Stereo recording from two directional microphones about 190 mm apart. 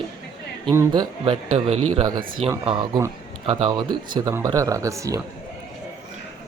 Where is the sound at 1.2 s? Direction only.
30° right (ahead or behind).